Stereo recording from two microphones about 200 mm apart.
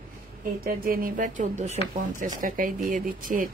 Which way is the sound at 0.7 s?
45° right (ahead or behind).